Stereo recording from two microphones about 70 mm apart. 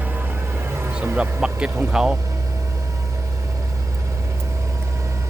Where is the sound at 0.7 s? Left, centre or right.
Right.